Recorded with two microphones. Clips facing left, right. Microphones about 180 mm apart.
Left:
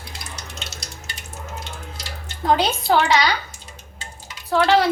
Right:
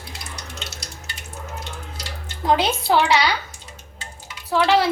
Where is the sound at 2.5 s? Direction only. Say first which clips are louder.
Even; 5° right (ahead or behind).